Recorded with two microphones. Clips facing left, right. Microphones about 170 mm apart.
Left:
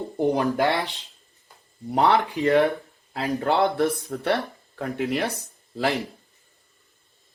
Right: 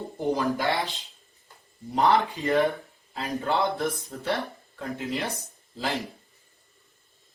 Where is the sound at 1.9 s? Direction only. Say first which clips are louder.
Left 2 dB; 65° left (ahead or behind).